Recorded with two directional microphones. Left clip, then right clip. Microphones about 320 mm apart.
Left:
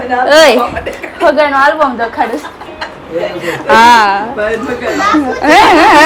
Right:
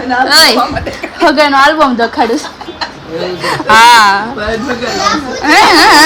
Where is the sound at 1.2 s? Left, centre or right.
Centre.